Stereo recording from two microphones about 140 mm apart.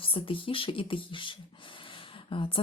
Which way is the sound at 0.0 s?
40° left (ahead or behind).